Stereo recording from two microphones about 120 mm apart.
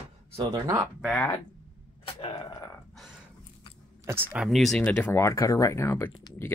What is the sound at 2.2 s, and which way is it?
Speech, 50° left (ahead or behind).